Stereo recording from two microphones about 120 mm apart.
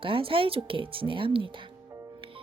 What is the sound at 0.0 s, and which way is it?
Speech, 50° right (ahead or behind).